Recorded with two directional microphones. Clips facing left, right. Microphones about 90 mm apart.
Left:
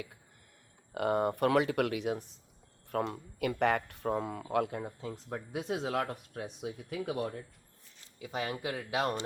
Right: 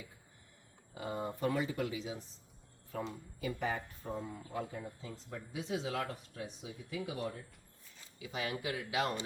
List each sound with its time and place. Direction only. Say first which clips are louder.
0.9 s speech: left 10 dB; 65° left (ahead or behind)
8.2 s speech: left 3 dB; 40° left (ahead or behind)